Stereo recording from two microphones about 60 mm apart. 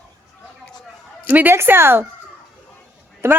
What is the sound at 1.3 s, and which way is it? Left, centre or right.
Speech, right.